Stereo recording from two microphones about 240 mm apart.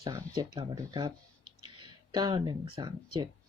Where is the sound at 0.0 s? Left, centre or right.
Centre.